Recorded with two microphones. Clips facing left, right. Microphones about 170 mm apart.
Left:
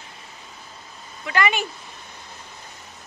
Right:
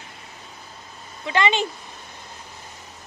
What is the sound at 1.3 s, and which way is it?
Speech, 25° right (ahead or behind).